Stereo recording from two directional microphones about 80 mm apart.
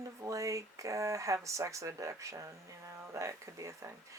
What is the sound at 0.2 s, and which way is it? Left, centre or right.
Speech, right.